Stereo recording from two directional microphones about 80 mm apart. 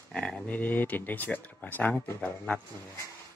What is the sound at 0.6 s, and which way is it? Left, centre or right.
Speech, left.